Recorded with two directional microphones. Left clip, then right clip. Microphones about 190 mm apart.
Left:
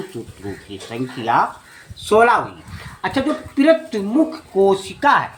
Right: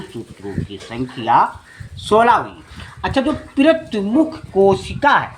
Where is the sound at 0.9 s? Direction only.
20° right (ahead or behind).